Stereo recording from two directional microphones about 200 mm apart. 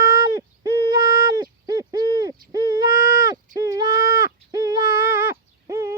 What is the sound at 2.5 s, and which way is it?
Speech, 20° right (ahead or behind).